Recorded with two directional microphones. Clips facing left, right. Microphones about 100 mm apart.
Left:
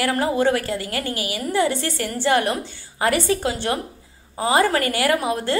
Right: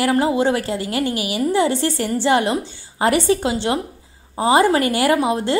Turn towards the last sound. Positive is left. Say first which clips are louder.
# right 3 dB
turn(degrees=-25)  # may be behind; listen again after turning